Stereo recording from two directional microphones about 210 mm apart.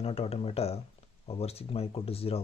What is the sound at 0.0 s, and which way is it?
Speech, 30° left (ahead or behind).